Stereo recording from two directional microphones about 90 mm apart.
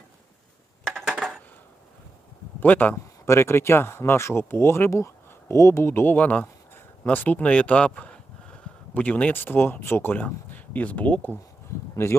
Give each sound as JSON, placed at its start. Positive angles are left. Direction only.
{"t": 0.9, "sound": "dishes", "side_deg": 5}
{"t": 2.6, "sound": "speech", "side_deg": 20}
{"t": 3.2, "sound": "speech", "side_deg": 30}
{"t": 12.0, "sound": "speech", "side_deg": 30}